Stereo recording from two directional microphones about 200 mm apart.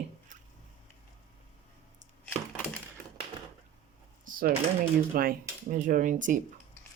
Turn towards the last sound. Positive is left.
turn(degrees=-40)  # may be behind; listen again after turning